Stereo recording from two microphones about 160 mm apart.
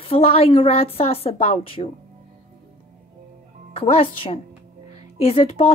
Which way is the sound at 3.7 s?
35° left (ahead or behind).